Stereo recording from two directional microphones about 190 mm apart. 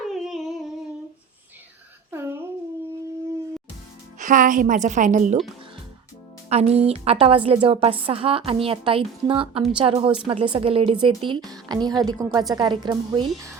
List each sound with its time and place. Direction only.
0.1 s humming: centre (ahead or behind)
2.0 s a sound: 10° right (ahead or behind)
4.2 s a woman's voice: 45° right (ahead or behind)
6.5 s a woman's voice: 35° right (ahead or behind)